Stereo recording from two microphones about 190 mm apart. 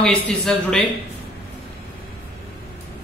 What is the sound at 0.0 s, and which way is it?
Speech, 5° left (ahead or behind).